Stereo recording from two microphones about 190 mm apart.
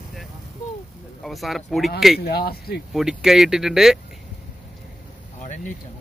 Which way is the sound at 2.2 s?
55° left (ahead or behind).